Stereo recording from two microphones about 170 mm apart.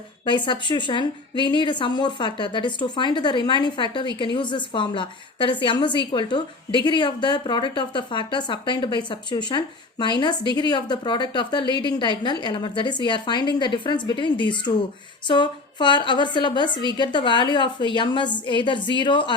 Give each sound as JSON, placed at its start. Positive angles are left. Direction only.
{"t": 0.3, "sound": "a woman's voice", "side_deg": 25}